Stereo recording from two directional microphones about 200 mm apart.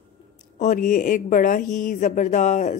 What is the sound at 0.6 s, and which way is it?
Speech, 40° left (ahead or behind).